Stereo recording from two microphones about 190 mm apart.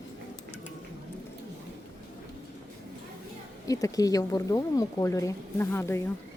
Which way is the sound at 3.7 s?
20° left (ahead or behind).